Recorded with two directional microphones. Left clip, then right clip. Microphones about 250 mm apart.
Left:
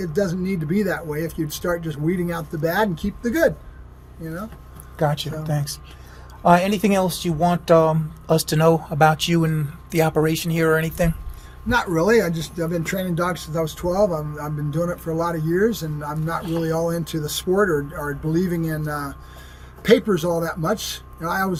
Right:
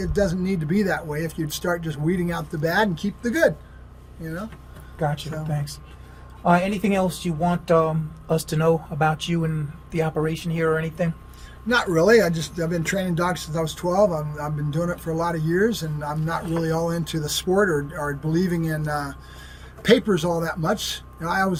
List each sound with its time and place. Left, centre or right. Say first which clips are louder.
0.0 s speech: even; centre
4.9 s speech: left 4 dB; left
11.7 s speech: right 1 dB; centre